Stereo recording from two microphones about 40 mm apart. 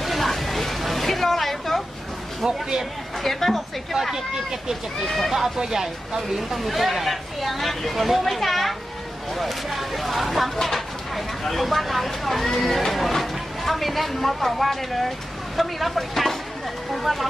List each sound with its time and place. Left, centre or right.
0.0 s music: centre
2.4 s speech: centre
3.2 s speech: centre
3.9 s speech: centre
5.0 s speech: centre
5.3 s speech: centre